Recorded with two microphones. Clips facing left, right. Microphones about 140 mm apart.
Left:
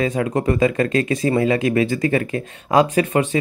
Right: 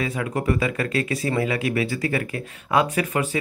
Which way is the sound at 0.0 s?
35° left (ahead or behind).